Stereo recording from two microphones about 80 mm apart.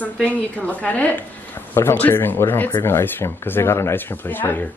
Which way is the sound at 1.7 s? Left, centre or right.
Left.